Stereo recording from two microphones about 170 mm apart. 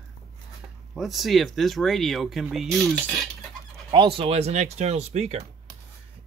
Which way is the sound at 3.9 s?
30° right (ahead or behind).